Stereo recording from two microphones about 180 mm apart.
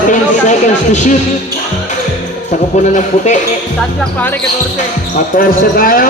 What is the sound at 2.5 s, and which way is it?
Speech, 45° left (ahead or behind).